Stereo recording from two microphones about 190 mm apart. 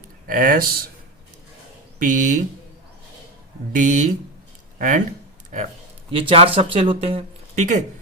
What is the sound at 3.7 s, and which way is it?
Speech, 40° right (ahead or behind).